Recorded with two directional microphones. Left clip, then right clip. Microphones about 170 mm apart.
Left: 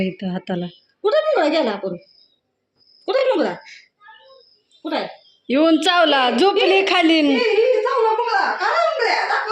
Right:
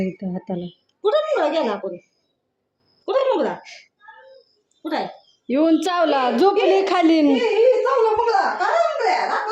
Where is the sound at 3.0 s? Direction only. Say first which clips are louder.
Left 1 dB; 30° left (ahead or behind).